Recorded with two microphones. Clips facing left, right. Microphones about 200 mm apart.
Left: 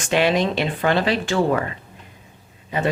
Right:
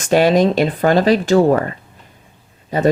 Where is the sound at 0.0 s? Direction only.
40° right (ahead or behind).